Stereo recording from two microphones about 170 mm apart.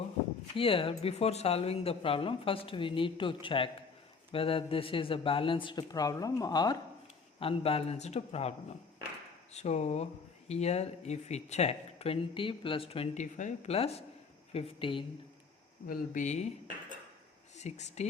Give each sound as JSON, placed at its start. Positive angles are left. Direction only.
{"t": 0.5, "sound": "speech", "side_deg": 30}
{"t": 9.6, "sound": "speech", "side_deg": 40}
{"t": 15.9, "sound": "speech", "side_deg": 45}
{"t": 17.6, "sound": "speech", "side_deg": 40}